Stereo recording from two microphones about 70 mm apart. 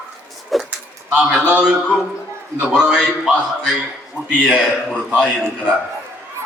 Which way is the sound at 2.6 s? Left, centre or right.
Centre.